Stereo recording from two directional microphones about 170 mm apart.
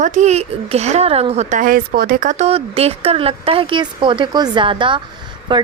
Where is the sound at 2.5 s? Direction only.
35° right (ahead or behind).